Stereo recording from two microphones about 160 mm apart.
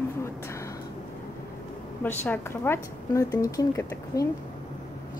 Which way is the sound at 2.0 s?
10° left (ahead or behind).